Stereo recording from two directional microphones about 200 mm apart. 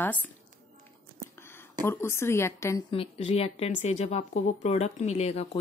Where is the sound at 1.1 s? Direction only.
15° left (ahead or behind).